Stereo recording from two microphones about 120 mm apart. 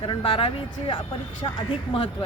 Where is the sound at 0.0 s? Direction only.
50° left (ahead or behind).